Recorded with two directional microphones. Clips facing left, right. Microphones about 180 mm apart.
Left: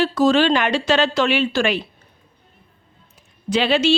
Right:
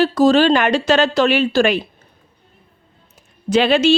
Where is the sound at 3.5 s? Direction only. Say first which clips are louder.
Right 4 dB; 50° right (ahead or behind).